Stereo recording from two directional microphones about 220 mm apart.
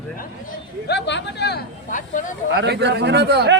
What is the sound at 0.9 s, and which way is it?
Speech, 50° left (ahead or behind).